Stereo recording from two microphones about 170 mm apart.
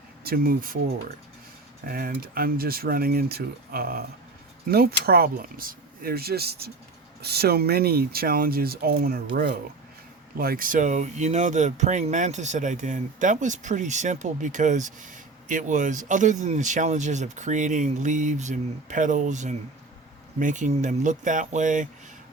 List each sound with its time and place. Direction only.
0.3 s speech: 60° right (ahead or behind)
1.9 s speech: 60° right (ahead or behind)
10.3 s speech: 60° right (ahead or behind)